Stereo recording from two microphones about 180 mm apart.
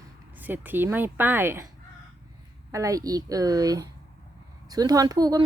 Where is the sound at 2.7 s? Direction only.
20° right (ahead or behind).